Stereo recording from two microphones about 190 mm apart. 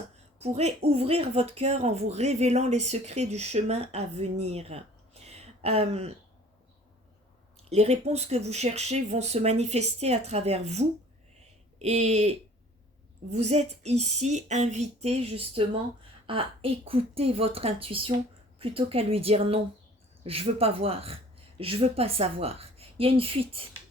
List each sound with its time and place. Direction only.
0.3 s speech: 35° right (ahead or behind)
7.7 s a woman's voice: 35° right (ahead or behind)